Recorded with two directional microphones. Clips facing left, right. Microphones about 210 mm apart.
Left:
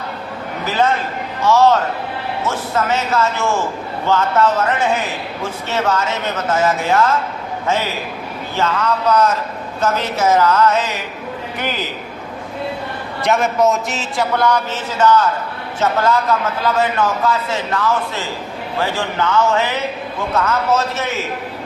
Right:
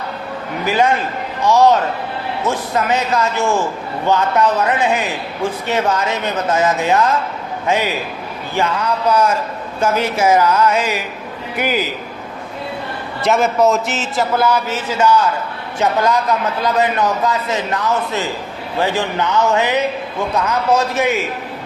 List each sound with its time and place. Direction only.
0.6 s speech: 15° right (ahead or behind)
8.5 s speech: 15° right (ahead or behind)
13.2 s a man's voice: centre (ahead or behind)